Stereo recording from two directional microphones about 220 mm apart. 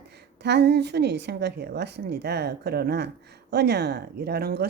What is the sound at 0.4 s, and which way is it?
Speech, 50° right (ahead or behind).